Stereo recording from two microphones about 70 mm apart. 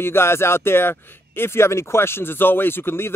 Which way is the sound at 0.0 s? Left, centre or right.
Left.